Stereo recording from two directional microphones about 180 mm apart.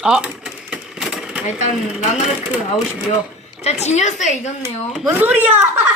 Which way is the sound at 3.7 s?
40° left (ahead or behind).